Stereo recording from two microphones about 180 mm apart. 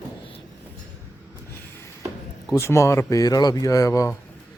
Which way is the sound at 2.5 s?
15° left (ahead or behind).